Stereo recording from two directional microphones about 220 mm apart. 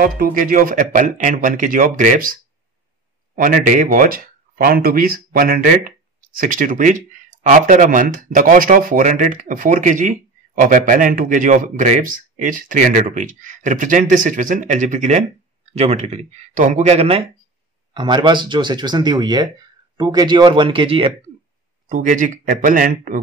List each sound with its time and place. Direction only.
0.0 s speech: 40° right (ahead or behind)
3.3 s speech: 40° right (ahead or behind)
21.8 s speech: 35° right (ahead or behind)